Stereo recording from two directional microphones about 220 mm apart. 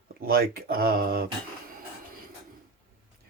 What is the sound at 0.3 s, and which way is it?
Speech, 45° right (ahead or behind).